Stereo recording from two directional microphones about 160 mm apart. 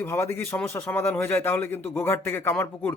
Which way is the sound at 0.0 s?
15° left (ahead or behind).